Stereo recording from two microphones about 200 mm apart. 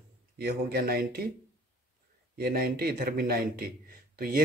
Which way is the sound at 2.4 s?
50° right (ahead or behind).